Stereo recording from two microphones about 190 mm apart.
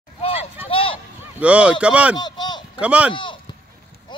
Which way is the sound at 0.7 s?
30° left (ahead or behind).